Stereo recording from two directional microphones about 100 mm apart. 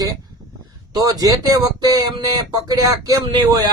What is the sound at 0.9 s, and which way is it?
Speech, 35° right (ahead or behind).